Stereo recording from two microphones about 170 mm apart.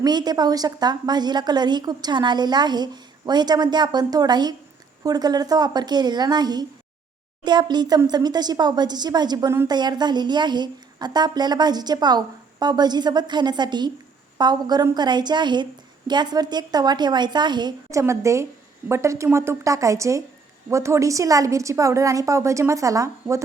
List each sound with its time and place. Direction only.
0.0 s a woman's voice: 25° right (ahead or behind)